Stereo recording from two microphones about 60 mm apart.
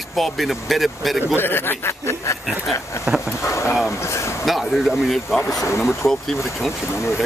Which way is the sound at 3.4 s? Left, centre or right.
Left.